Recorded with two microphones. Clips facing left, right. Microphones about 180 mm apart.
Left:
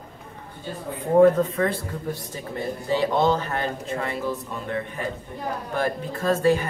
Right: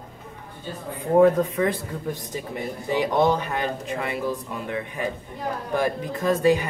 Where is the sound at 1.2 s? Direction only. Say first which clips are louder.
Left 1 dB; 15° right (ahead or behind).